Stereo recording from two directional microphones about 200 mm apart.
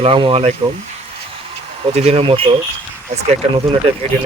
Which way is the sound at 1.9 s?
30° right (ahead or behind).